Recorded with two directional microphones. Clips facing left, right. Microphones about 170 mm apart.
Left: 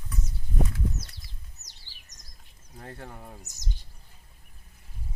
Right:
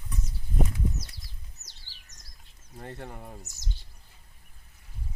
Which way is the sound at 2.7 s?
Centre (ahead or behind).